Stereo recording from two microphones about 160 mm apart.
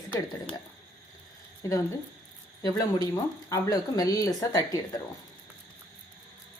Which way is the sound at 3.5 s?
25° left (ahead or behind).